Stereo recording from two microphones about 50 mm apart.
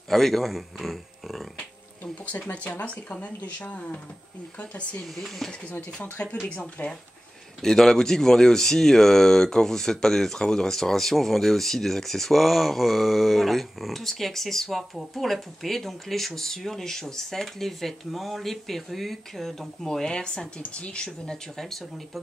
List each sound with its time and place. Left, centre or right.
0.1 s a man's voice: centre
2.5 s speech: left
5.0 s speech: centre
5.5 s speech: left
6.2 s speech: left
7.6 s speech: centre
21.5 s speech: centre